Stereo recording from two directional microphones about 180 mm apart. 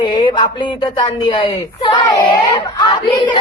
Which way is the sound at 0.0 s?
25° left (ahead or behind).